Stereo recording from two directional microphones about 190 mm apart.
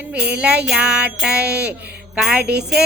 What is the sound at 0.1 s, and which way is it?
Music, 5° right (ahead or behind).